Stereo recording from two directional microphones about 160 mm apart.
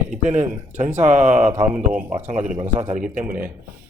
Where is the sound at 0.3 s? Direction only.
45° right (ahead or behind).